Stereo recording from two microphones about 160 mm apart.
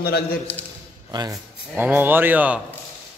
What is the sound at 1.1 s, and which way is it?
Speech, 25° right (ahead or behind).